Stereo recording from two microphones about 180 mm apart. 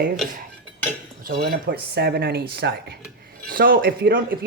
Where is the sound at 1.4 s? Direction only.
60° right (ahead or behind).